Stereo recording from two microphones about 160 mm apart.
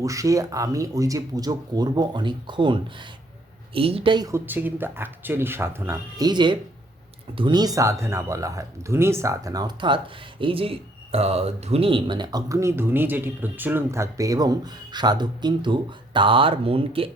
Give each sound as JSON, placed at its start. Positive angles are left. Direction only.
{"t": 0.0, "sound": "speech", "side_deg": -20}
{"t": 3.8, "sound": "speech", "side_deg": -35}